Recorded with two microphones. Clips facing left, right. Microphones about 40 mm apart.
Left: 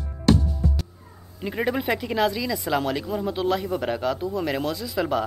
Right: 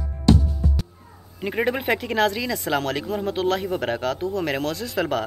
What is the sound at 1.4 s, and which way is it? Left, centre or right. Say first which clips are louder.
Speech: right 2 dB; centre.